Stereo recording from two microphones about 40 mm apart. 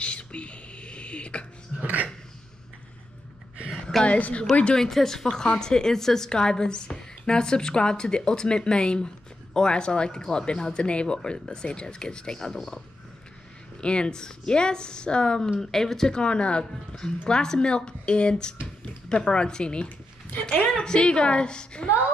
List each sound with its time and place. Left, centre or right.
0.0 s whispering: left
1.8 s a sound: right
4.0 s a woman's voice: left
4.7 s a woman's voice: centre
13.7 s a woman's voice: left
15.6 s speech: centre
16.2 s a woman's voice: left